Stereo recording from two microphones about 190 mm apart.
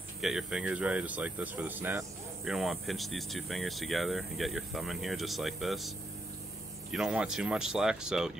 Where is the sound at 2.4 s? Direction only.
Centre (ahead or behind).